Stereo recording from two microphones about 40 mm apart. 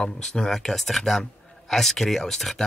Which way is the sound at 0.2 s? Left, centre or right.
Centre.